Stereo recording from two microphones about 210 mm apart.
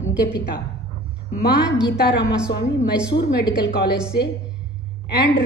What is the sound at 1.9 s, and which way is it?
A woman's voice, 50° left (ahead or behind).